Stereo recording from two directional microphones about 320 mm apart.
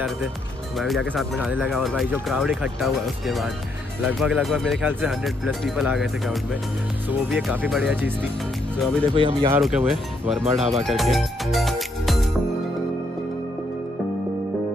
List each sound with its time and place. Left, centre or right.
0.7 s speech: centre
9.1 s speech: centre
9.6 s speech: centre